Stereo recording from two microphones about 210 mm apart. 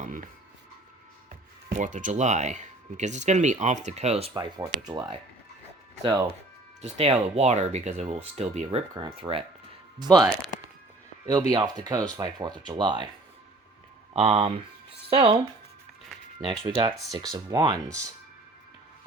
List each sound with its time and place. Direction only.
0.0 s music: 40° right (ahead or behind)
1.7 s speech: 35° right (ahead or behind)
4.4 s speech: 20° right (ahead or behind)
6.8 s speech: 30° right (ahead or behind)
11.3 s speech: 20° right (ahead or behind)
14.1 s speech: 25° right (ahead or behind)
16.4 s speech: 25° right (ahead or behind)